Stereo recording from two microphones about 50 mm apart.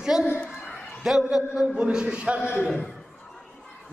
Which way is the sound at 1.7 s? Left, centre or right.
Centre.